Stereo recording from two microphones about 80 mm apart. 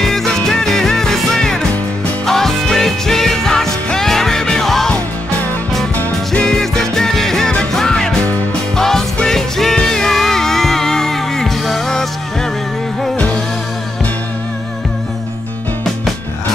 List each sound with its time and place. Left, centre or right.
0.0 s music: centre
5.9 s music: left
6.4 s music: centre